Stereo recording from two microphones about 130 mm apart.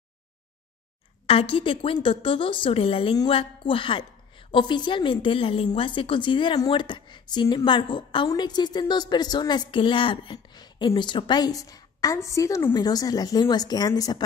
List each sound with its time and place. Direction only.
1.2 s a woman's voice: 45° left (ahead or behind); by 14.2 s 30° left (ahead or behind)